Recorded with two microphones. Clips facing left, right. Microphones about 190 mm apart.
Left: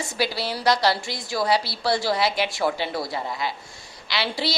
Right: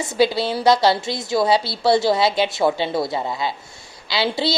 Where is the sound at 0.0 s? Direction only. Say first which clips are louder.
Right 8 dB; 20° right (ahead or behind).